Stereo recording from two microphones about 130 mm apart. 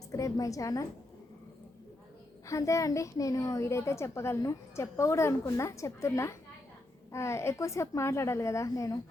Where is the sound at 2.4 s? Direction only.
25° left (ahead or behind).